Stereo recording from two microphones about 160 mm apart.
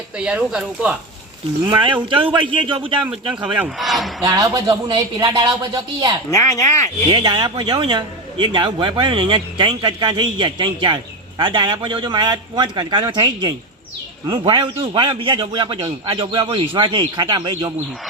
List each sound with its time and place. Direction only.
0.2 s speech: 5° right (ahead or behind)
1.6 s a man's voice: 30° right (ahead or behind)
3.1 s a man's voice: 5° right (ahead or behind)
4.2 s a man's voice: 25° right (ahead or behind)
6.3 s speech: 20° left (ahead or behind)
7.1 s a man's voice: 25° right (ahead or behind)